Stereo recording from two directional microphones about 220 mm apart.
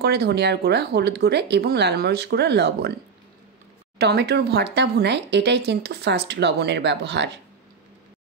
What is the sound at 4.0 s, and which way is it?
Speech, 50° right (ahead or behind).